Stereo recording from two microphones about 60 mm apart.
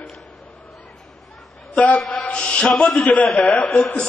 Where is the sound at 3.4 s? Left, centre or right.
Left.